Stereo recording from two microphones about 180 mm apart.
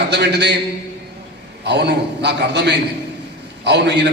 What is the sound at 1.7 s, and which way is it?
A man's voice, 70° right (ahead or behind).